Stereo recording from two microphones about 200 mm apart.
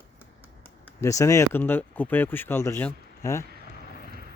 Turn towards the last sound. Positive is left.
turn(degrees=45)  # may be behind; listen again after turning